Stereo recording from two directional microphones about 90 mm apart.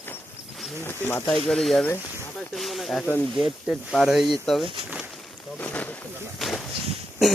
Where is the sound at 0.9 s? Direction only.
25° left (ahead or behind).